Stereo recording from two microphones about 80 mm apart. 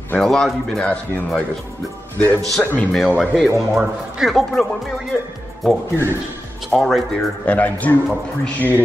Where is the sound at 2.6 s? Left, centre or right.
Left.